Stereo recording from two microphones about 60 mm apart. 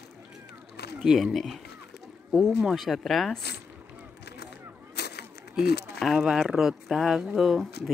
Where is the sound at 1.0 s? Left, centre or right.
Centre.